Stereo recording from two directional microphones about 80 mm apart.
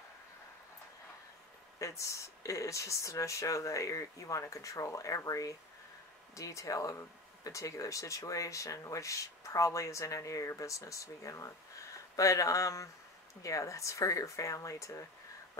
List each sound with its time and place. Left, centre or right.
1.8 s speech: left